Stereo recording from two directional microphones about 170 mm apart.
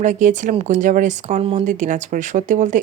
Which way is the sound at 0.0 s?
50° right (ahead or behind).